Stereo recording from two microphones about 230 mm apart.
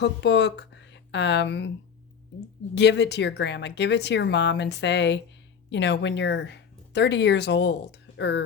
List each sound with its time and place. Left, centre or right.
0.0 s speech: left
2.7 s speech: left